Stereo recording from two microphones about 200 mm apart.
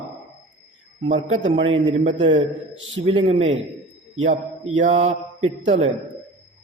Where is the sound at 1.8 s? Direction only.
30° right (ahead or behind).